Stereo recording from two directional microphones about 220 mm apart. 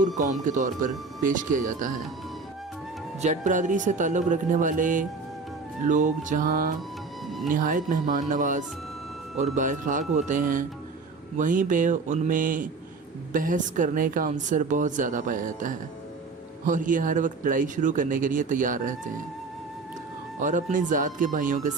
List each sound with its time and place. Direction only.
0.2 s speech: 35° right (ahead or behind)
3.2 s speech: 35° right (ahead or behind)
20.4 s speech: 35° right (ahead or behind)